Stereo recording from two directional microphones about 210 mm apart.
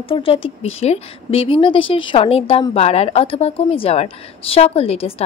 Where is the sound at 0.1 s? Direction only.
25° left (ahead or behind).